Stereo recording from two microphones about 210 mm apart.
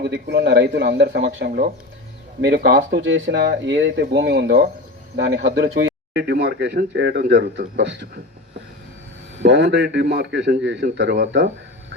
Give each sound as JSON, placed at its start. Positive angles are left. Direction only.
{"t": 0.0, "sound": "speech", "side_deg": -55}
{"t": 9.4, "sound": "speech", "side_deg": -55}